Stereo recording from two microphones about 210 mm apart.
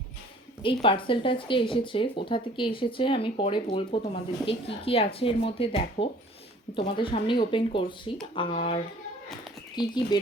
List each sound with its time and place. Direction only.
0.6 s speech: 25° left (ahead or behind)